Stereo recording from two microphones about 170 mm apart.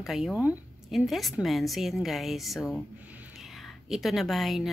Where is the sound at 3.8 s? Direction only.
Centre (ahead or behind).